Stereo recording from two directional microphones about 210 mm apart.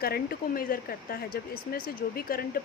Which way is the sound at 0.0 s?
45° left (ahead or behind).